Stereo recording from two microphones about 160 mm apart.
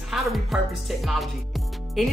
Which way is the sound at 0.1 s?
Centre (ahead or behind).